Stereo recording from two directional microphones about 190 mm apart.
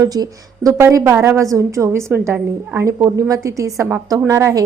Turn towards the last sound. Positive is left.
turn(degrees=-15)  # may be behind; listen again after turning